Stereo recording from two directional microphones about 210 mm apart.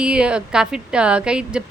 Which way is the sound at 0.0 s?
5° right (ahead or behind).